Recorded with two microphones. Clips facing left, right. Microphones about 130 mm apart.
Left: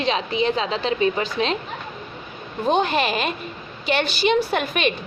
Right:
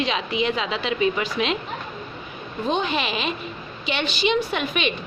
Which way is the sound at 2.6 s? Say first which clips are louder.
Left 4 dB; 50° left (ahead or behind).